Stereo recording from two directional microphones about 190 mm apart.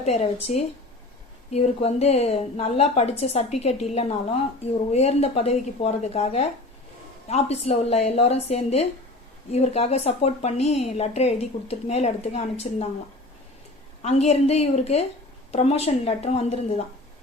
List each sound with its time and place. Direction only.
0.0 s a woman's voice: 35° left (ahead or behind)
14.0 s a woman's voice: 35° left (ahead or behind)